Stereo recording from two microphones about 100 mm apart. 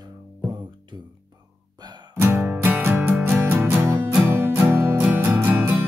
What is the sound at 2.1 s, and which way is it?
Music, 25° right (ahead or behind).